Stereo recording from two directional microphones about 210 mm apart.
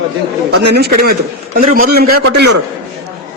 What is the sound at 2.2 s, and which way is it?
Speech, 65° right (ahead or behind).